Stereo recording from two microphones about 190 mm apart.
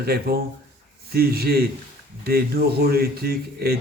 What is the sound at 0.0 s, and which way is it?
A man's voice, 55° right (ahead or behind).